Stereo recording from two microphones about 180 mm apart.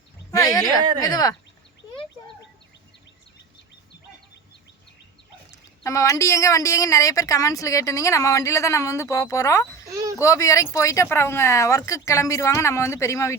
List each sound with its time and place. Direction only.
0.3 s speech: 20° left (ahead or behind)
5.5 s a woman's voice: 15° left (ahead or behind)
9.9 s a sound: 20° right (ahead or behind)
10.2 s a woman's voice: 15° left (ahead or behind)